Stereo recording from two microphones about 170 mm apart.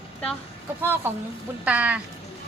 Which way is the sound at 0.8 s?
10° right (ahead or behind).